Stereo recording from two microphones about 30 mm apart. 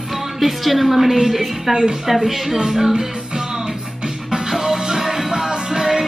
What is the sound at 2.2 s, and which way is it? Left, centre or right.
Speech, centre.